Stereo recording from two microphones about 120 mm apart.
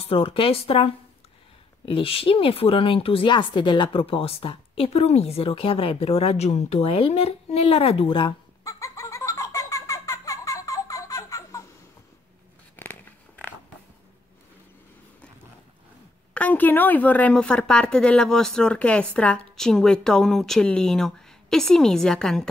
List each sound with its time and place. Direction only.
0.0 s speech: 50° left (ahead or behind)
1.9 s speech: 50° left (ahead or behind)
8.6 s a sound: 25° left (ahead or behind)
16.3 s speech: 15° left (ahead or behind)